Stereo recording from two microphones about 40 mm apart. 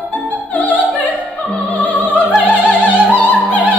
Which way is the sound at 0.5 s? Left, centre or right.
Left.